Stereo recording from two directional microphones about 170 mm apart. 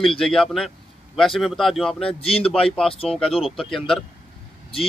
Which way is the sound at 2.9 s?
35° left (ahead or behind).